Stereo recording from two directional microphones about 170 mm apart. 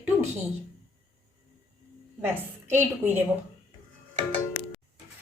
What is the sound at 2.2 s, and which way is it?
A woman's voice, 15° right (ahead or behind).